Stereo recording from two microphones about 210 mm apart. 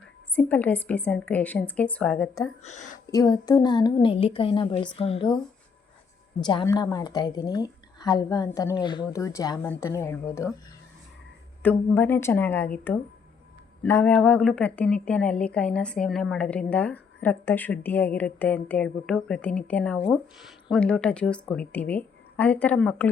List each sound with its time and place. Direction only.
0.3 s a woman's voice: 5° left (ahead or behind)
2.6 s a woman's voice: 35° left (ahead or behind)
3.1 s a woman's voice: 15° left (ahead or behind)
6.4 s a woman's voice: 20° left (ahead or behind)
11.6 s a woman's voice: 10° left (ahead or behind)
13.8 s a woman's voice: 10° left (ahead or behind)